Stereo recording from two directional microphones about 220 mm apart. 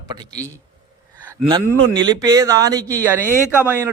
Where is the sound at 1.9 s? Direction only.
20° right (ahead or behind).